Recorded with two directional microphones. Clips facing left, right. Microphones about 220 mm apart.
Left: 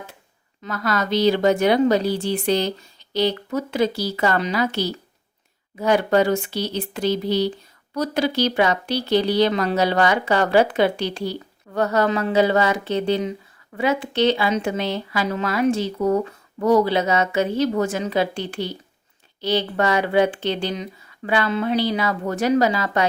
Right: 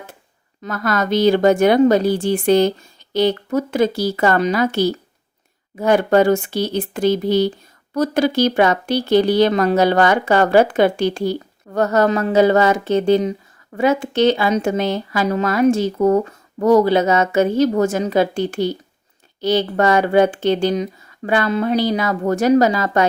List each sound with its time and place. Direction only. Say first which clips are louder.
0.6 s speech: right 3 dB; 50° right (ahead or behind)